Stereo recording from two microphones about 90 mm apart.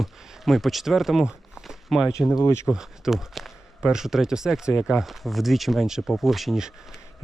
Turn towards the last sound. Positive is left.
turn(degrees=-5)  # may be behind; listen again after turning